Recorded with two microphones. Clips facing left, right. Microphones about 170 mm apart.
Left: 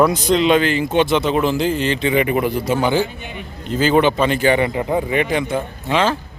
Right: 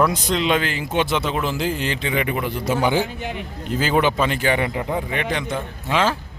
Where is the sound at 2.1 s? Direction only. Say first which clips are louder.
Left 6 dB; 45° left (ahead or behind).